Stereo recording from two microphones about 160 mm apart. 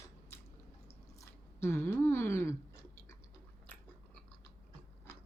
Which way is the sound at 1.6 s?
15° left (ahead or behind).